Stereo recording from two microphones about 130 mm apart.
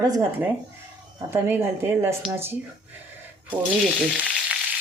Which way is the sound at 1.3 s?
20° right (ahead or behind).